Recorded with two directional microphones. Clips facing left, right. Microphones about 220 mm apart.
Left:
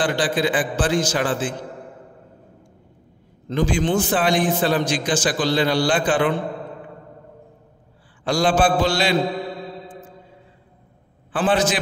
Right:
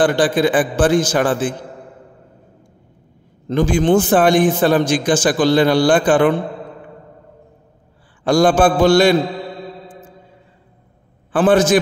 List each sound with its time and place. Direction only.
0.0 s a man's voice: 50° right (ahead or behind)
3.4 s a man's voice: 50° right (ahead or behind)
8.2 s a man's voice: 50° right (ahead or behind)
11.3 s a man's voice: 50° right (ahead or behind)